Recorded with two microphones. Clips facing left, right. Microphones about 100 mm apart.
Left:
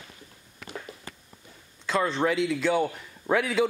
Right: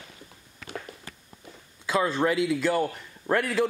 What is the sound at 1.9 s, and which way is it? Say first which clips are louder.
A man's voice: right 1 dB; 5° right (ahead or behind).